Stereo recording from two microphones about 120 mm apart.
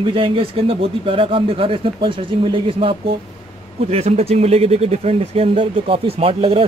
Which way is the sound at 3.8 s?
60° right (ahead or behind).